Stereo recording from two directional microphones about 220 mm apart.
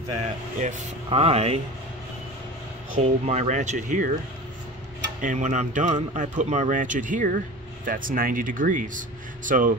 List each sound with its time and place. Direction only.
0.2 s speech: 30° right (ahead or behind)
3.0 s speech: 30° right (ahead or behind)
5.2 s speech: 35° right (ahead or behind)